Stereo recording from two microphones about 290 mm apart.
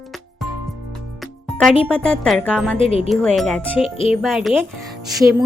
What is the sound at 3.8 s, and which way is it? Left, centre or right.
Speech, centre.